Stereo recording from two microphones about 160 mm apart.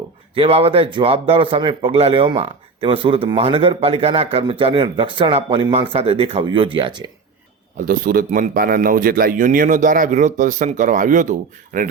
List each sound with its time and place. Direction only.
0.3 s speech: 35° right (ahead or behind)
7.8 s a man's voice: 60° right (ahead or behind)